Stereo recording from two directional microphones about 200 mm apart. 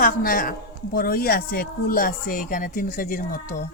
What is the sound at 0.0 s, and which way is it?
Speech, 45° left (ahead or behind).